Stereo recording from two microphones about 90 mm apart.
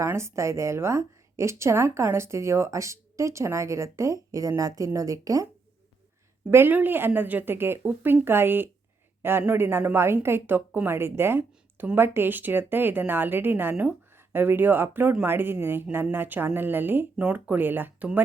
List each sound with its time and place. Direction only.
0.0 s a woman's voice: 30° right (ahead or behind)
6.5 s a woman's voice: 25° right (ahead or behind)